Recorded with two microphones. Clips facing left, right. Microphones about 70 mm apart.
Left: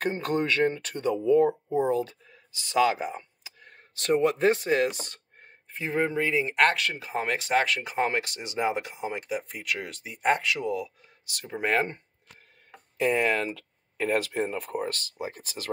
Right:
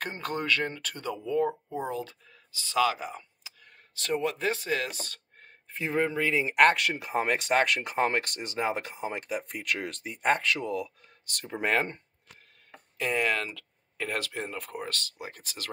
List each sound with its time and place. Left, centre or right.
0.0 s speech: left
3.2 s a sound: left
5.7 s speech: centre
6.0 s speech: left
6.5 s speech: centre
13.0 s speech: centre